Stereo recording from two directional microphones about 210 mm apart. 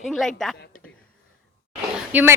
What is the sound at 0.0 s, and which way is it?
Speech, centre (ahead or behind).